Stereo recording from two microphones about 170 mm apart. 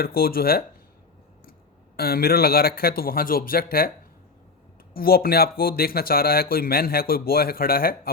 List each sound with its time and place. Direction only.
0.0 s speech: 60° left (ahead or behind)
2.0 s speech: 65° left (ahead or behind)
4.9 s speech: 60° left (ahead or behind)